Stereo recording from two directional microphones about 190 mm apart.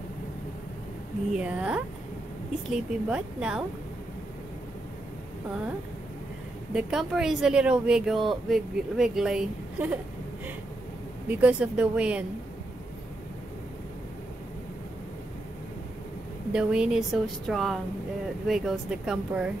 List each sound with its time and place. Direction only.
1.3 s speech: 5° right (ahead or behind)
6.7 s speech: 5° right (ahead or behind)
11.2 s speech: 10° right (ahead or behind)
16.5 s speech: 5° right (ahead or behind)